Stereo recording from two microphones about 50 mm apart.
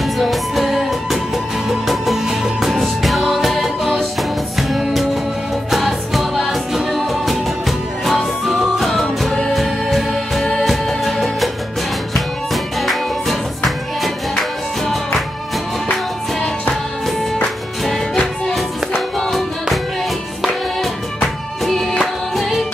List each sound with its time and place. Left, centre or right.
0.0 s music: centre
12.8 s music: centre
19.1 s music: centre
21.6 s music: centre